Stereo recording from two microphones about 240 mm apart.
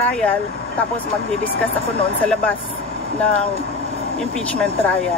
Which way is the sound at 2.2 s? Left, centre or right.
Centre.